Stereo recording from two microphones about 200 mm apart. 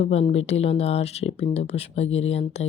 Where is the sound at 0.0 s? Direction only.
30° left (ahead or behind).